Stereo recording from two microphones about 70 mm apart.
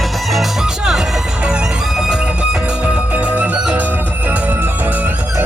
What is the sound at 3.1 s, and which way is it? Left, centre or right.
Music, right.